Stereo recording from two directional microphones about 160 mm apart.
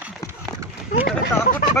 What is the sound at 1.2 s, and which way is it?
Speech, 60° left (ahead or behind).